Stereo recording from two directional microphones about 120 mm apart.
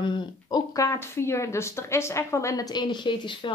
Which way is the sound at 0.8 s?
25° left (ahead or behind).